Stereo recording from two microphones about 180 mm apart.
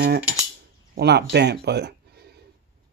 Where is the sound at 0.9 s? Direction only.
70° right (ahead or behind).